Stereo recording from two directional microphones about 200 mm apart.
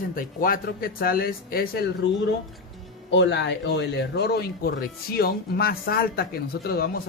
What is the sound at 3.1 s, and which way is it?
Speech, 60° left (ahead or behind).